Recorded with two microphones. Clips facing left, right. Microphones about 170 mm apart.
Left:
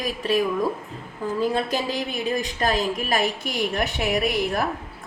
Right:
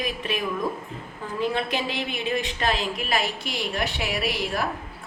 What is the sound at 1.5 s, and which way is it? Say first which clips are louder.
A woman's voice: left 3 dB; 40° left (ahead or behind).